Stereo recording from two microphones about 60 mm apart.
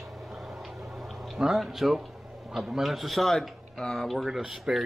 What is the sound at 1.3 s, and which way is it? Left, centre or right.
Speech, centre.